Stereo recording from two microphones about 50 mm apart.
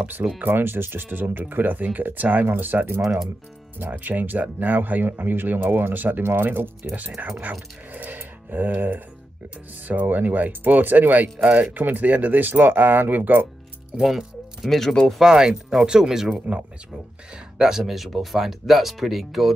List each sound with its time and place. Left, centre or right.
0.4 s speech: right
3.0 s speech: centre
3.7 s speech: right
7.9 s a sound: right
9.8 s speech: right
14.0 s music: centre
15.2 s speech: centre
16.3 s speech: right
17.6 s speech: centre